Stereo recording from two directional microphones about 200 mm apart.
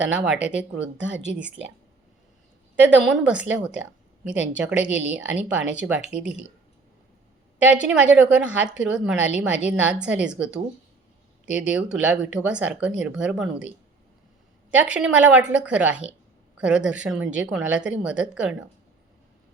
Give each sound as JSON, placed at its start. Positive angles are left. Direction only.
{"t": 0.0, "sound": "speech", "side_deg": -5}
{"t": 0.9, "sound": "a woman's voice", "side_deg": -65}
{"t": 1.2, "sound": "a woman's voice", "side_deg": -5}
{"t": 3.1, "sound": "a woman's voice", "side_deg": -5}
{"t": 7.6, "sound": "a woman's voice", "side_deg": -5}